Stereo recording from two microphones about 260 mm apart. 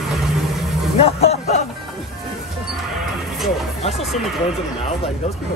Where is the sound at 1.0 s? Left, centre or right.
Left.